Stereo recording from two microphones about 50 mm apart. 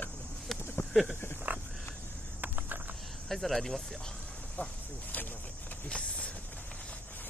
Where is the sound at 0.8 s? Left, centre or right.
Left.